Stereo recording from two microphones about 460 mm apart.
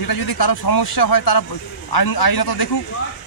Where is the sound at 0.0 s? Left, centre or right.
Left.